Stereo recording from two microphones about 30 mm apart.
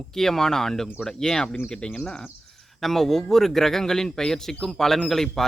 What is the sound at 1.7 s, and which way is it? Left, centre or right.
Speech, left.